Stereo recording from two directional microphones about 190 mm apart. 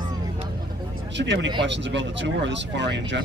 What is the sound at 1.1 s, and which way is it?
Speech, 70° right (ahead or behind).